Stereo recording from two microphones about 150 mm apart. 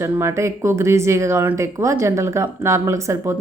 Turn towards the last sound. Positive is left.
turn(degrees=-20)  # may be behind; listen again after turning